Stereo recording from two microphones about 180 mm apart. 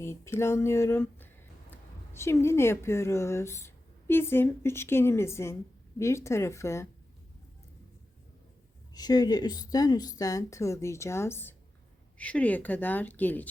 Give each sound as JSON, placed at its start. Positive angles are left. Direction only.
{"t": 0.0, "sound": "speech", "side_deg": 15}
{"t": 8.9, "sound": "a woman's voice", "side_deg": 20}